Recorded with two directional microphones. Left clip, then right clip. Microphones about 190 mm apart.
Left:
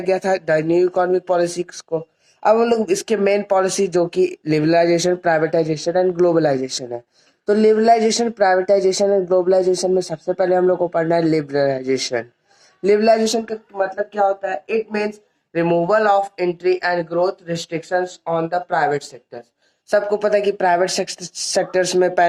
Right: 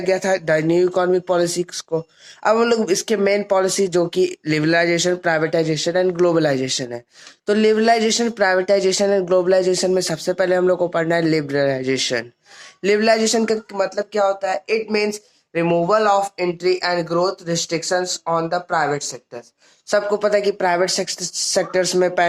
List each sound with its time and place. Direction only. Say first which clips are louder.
0.0 s speech: even; 25° right (ahead or behind)
13.0 s speech: left 1 dB; 10° right (ahead or behind)
13.7 s speech: left 4 dB; 25° right (ahead or behind)